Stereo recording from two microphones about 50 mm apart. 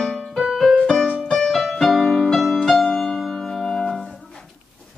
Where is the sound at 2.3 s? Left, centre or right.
Centre.